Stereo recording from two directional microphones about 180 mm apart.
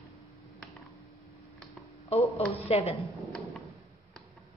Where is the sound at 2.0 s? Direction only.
35° left (ahead or behind).